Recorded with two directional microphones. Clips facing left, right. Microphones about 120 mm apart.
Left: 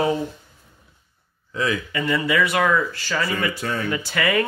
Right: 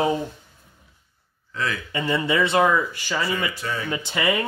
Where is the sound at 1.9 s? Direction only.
25° right (ahead or behind).